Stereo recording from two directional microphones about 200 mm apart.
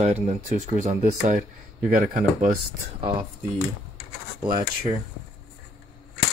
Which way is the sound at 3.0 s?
25° right (ahead or behind).